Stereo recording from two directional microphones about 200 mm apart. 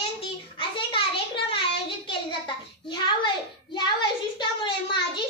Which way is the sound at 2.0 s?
25° left (ahead or behind).